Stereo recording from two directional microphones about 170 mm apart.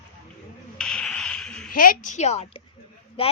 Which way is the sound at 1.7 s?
55° left (ahead or behind).